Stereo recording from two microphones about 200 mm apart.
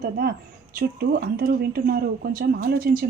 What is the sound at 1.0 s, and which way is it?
Speech, 50° right (ahead or behind).